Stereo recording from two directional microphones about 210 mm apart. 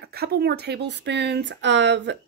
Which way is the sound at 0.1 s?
50° right (ahead or behind).